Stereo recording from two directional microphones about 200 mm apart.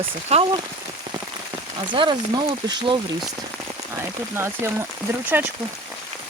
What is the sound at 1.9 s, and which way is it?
Speech, 25° right (ahead or behind).